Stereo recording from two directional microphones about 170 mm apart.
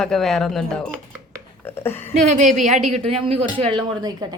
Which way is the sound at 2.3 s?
45° right (ahead or behind).